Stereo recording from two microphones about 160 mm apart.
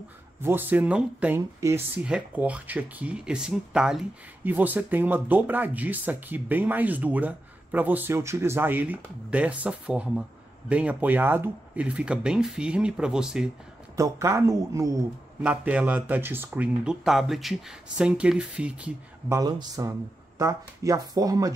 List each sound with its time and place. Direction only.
0.4 s speech: 15° right (ahead or behind)
13.9 s speech: 20° right (ahead or behind)
15.4 s speech: 10° right (ahead or behind)
19.3 s speech: 20° right (ahead or behind)